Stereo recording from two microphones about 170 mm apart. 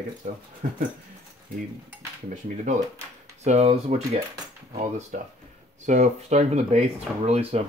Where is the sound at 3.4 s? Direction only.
40° right (ahead or behind).